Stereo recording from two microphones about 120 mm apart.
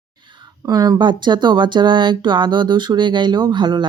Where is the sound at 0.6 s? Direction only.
30° right (ahead or behind).